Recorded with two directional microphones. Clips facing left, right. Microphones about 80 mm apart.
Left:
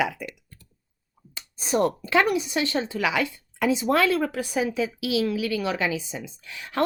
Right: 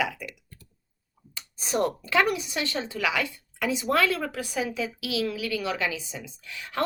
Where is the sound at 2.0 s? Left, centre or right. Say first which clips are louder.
Left 2 dB; left.